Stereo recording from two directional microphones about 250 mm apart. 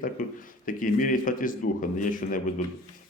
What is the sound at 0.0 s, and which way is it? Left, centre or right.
Speech, left.